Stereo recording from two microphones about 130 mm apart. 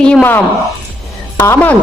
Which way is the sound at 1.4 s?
15° left (ahead or behind).